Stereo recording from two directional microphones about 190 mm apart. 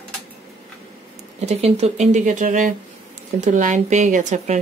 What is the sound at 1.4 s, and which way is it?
Speech, 35° right (ahead or behind).